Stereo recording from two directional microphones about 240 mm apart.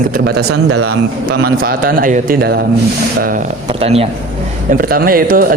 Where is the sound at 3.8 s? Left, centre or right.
Right.